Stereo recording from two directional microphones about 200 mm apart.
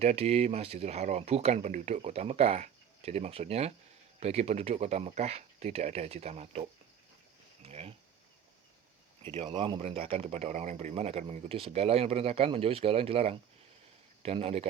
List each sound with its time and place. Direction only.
0.0 s speech: 30° right (ahead or behind)
9.3 s speech: 25° right (ahead or behind)